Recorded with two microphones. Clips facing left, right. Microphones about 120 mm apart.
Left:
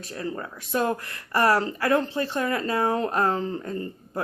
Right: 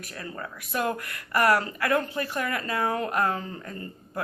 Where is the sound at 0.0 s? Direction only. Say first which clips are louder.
Left 5 dB; 25° left (ahead or behind).